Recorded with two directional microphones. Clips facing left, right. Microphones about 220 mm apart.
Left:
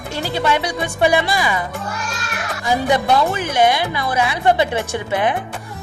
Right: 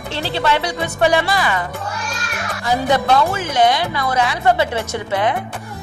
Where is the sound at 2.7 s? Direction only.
15° left (ahead or behind).